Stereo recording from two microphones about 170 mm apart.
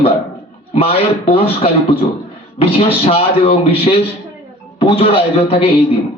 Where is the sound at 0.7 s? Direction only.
35° left (ahead or behind).